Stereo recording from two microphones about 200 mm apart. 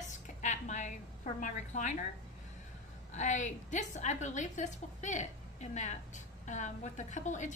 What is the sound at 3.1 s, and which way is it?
A woman's voice, 35° left (ahead or behind).